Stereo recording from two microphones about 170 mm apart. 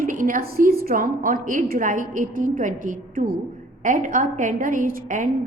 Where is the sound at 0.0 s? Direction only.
50° right (ahead or behind).